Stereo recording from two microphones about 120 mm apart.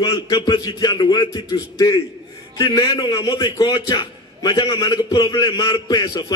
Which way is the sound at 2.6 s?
35° left (ahead or behind).